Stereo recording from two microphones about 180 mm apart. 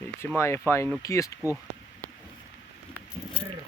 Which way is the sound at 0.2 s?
15° left (ahead or behind).